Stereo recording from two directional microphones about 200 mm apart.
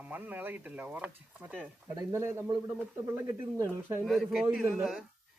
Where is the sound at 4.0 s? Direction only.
Centre (ahead or behind).